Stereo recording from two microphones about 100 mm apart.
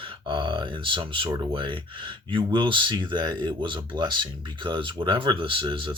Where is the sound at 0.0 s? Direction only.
55° right (ahead or behind).